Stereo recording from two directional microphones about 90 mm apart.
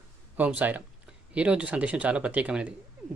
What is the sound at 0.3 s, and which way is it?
Speech, 20° right (ahead or behind).